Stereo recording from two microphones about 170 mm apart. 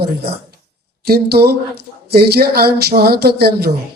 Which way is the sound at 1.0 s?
65° right (ahead or behind).